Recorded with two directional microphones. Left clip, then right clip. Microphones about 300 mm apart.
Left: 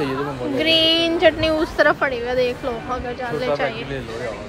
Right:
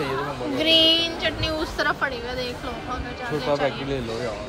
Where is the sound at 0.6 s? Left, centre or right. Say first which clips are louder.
Left 1 dB; centre.